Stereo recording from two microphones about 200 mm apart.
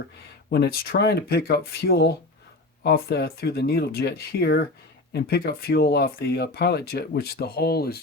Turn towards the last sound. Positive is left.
turn(degrees=50)  # may be behind; listen again after turning